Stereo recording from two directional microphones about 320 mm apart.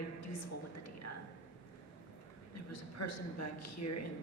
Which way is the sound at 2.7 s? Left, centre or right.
Left.